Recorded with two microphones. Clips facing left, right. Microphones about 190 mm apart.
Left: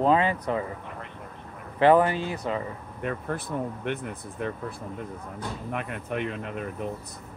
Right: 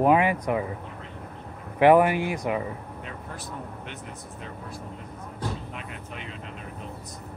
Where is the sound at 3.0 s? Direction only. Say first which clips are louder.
Left 8 dB; 55° left (ahead or behind).